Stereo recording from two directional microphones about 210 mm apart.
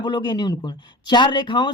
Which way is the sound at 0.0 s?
20° left (ahead or behind).